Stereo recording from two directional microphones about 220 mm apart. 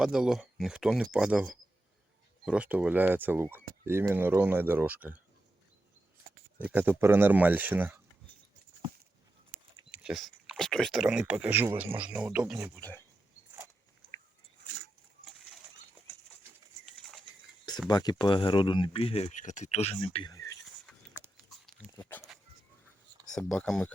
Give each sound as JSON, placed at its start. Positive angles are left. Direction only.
{"t": 0.0, "sound": "speech", "side_deg": 0}
{"t": 2.5, "sound": "speech", "side_deg": -5}
{"t": 6.6, "sound": "speech", "side_deg": -5}
{"t": 9.9, "sound": "speech", "side_deg": 0}
{"t": 12.8, "sound": "speech", "side_deg": 10}
{"t": 17.8, "sound": "speech", "side_deg": 20}
{"t": 20.3, "sound": "a sound", "side_deg": 15}
{"t": 21.8, "sound": "dog", "side_deg": 5}
{"t": 23.2, "sound": "speech", "side_deg": 5}